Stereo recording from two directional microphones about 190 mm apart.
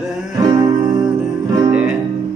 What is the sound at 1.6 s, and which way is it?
Music, 5° right (ahead or behind).